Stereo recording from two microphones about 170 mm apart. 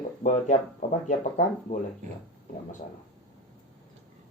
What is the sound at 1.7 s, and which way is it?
Speech, 60° left (ahead or behind).